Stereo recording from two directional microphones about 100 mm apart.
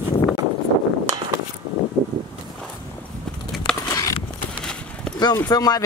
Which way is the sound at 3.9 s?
35° left (ahead or behind).